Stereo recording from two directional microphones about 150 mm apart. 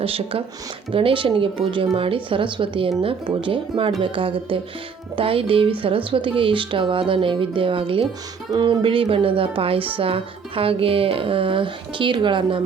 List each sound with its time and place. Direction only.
0.0 s speech: 40° right (ahead or behind)